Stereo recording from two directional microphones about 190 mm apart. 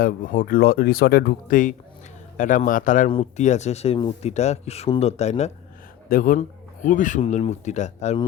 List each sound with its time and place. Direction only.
0.0 s speech: 45° left (ahead or behind)
6.1 s speech: 50° left (ahead or behind)